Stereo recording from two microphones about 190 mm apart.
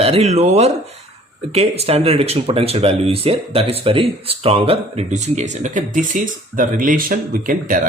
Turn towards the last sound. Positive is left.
turn(degrees=-45)  # may be behind; listen again after turning